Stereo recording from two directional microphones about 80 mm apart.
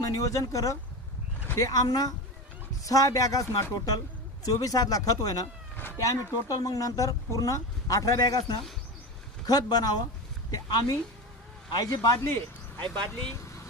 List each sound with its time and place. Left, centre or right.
0.0 s speech: left